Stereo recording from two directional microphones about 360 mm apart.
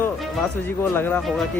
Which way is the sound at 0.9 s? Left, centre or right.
Centre.